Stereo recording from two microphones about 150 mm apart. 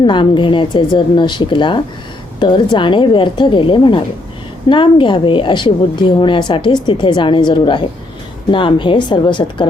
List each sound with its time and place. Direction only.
0.0 s a woman's voice: 35° left (ahead or behind)